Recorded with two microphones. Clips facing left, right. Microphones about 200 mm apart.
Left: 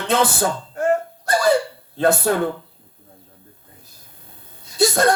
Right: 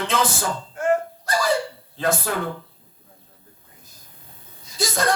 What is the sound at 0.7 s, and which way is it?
Dog, 40° left (ahead or behind).